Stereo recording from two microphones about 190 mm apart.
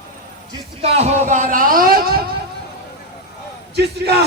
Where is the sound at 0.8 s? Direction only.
35° right (ahead or behind); by 2.2 s 50° right (ahead or behind).